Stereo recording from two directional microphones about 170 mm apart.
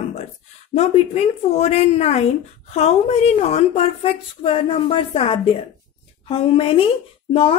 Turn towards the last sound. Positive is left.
turn(degrees=35)  # may be behind; listen again after turning